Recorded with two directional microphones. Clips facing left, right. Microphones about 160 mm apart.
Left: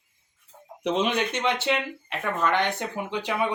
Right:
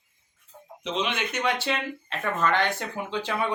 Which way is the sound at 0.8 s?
50° left (ahead or behind).